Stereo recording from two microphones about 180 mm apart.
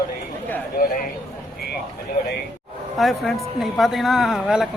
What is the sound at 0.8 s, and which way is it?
Speech, 55° left (ahead or behind).